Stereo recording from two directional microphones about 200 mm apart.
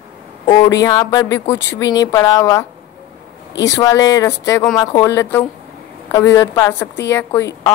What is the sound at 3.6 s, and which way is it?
Speech, 15° left (ahead or behind).